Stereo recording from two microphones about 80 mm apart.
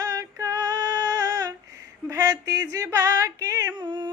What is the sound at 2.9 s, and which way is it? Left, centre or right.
Female singing, right.